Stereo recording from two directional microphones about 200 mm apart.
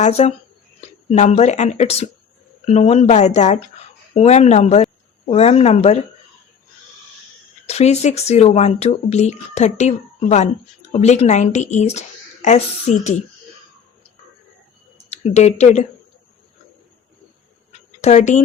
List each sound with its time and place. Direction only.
0.0 s speech: 35° left (ahead or behind)
7.7 s speech: 35° left (ahead or behind)
15.1 s speech: 35° left (ahead or behind)
17.7 s a sound: 35° left (ahead or behind)